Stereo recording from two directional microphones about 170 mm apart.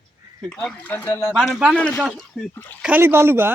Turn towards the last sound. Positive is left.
turn(degrees=-15)  # may be behind; listen again after turning